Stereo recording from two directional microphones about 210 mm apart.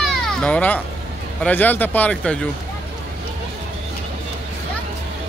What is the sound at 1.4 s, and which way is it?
Speech, 10° left (ahead or behind).